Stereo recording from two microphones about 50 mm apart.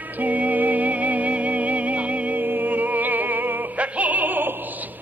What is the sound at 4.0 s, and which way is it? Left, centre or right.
Opera, right.